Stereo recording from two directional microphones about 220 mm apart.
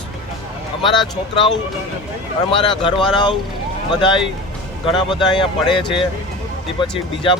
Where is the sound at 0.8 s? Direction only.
20° left (ahead or behind).